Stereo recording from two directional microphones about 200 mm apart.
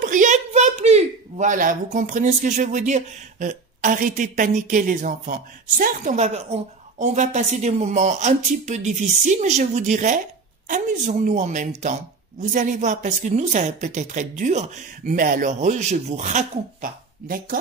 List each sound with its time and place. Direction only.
0.0 s a woman's voice: 40° right (ahead or behind)